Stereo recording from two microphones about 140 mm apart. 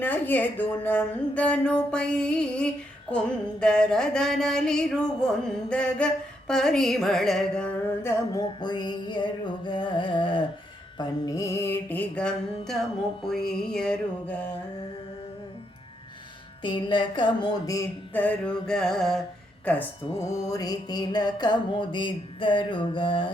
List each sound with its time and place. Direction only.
0.0 s a woman's voice: 10° left (ahead or behind)
3.6 s a sound: 5° left (ahead or behind)
8.0 s music: 25° left (ahead or behind)
10.9 s a woman's voice: 30° left (ahead or behind); by 12.7 s 10° left (ahead or behind)
13.2 s a sound: 5° left (ahead or behind)
16.6 s music: 35° left (ahead or behind)
18.1 s a sound: 10° left (ahead or behind)
19.6 s a woman's voice: 10° left (ahead or behind)
20.5 s music: 25° left (ahead or behind)